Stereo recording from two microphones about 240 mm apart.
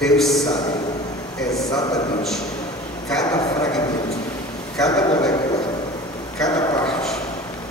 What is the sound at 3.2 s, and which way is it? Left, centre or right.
Speech, centre.